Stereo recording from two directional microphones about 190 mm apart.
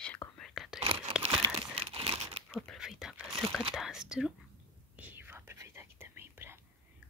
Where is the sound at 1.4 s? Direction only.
30° right (ahead or behind).